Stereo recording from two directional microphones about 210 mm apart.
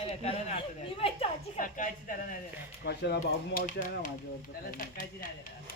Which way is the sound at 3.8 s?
40° left (ahead or behind).